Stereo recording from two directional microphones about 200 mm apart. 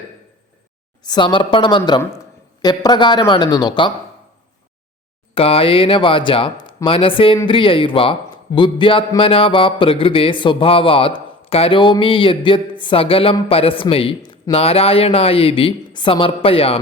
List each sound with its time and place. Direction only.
1.0 s a man's voice: 20° left (ahead or behind)
5.3 s a man's voice: 30° left (ahead or behind)